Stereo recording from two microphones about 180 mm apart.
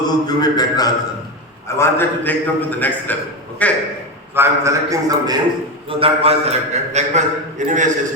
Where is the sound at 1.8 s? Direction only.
10° left (ahead or behind).